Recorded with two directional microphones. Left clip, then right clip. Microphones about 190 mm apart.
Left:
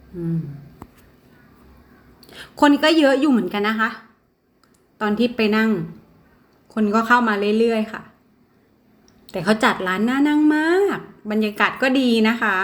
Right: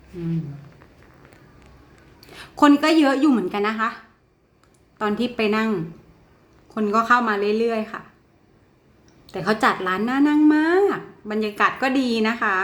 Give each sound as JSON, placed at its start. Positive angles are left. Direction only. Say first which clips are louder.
{"t": 2.3, "sound": "a woman's voice", "louder": "even", "side_deg": 5}
{"t": 9.2, "sound": "a woman's voice", "louder": "left 1 dB", "side_deg": 10}